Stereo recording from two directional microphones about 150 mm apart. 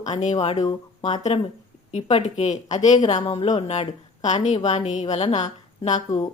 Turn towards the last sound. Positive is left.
turn(degrees=50)  # may be behind; listen again after turning